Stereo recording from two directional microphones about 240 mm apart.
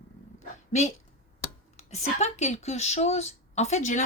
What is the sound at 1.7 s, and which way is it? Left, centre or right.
A woman's voice, left.